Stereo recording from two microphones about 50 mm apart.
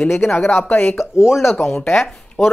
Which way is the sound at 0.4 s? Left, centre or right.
Left.